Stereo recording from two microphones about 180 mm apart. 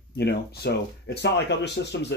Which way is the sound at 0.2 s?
65° left (ahead or behind).